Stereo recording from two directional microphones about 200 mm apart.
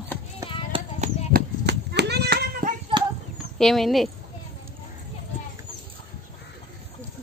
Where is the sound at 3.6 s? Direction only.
Centre (ahead or behind).